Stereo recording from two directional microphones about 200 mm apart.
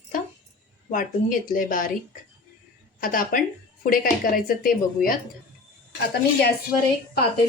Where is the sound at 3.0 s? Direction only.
45° left (ahead or behind).